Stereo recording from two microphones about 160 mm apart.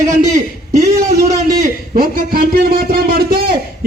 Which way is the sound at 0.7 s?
20° right (ahead or behind).